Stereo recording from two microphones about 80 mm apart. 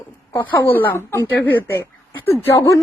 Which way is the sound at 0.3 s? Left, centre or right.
Left.